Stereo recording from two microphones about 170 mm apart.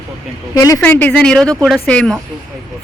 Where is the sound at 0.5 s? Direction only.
20° left (ahead or behind).